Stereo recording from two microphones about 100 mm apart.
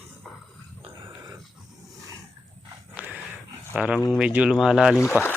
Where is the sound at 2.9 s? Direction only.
15° right (ahead or behind).